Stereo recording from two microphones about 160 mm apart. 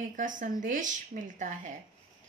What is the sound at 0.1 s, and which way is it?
Speech, 55° right (ahead or behind).